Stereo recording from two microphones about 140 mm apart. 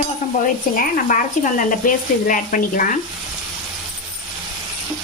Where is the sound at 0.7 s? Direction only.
80° left.